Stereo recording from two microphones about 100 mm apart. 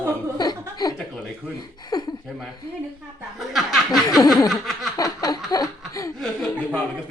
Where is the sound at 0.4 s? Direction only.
40° left (ahead or behind).